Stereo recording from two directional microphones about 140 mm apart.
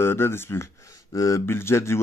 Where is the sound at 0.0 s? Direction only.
15° left (ahead or behind).